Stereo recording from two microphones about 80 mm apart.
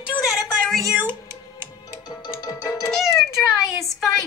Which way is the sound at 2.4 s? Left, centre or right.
Left.